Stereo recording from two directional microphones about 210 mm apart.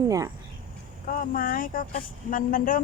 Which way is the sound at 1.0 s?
40° left (ahead or behind).